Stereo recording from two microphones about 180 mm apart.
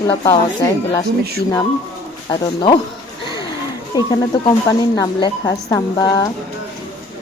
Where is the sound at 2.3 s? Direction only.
25° left (ahead or behind).